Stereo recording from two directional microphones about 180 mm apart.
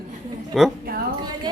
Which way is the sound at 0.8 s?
55° right (ahead or behind).